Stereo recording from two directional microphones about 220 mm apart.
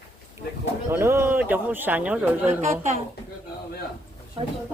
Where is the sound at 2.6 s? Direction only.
30° right (ahead or behind).